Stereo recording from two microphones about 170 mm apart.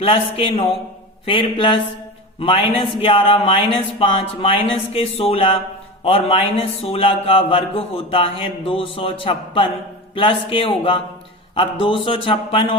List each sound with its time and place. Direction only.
0.0 s a man's voice: 35° left (ahead or behind)